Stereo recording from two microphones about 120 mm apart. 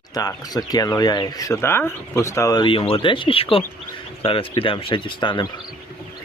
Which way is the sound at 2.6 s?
45° left (ahead or behind).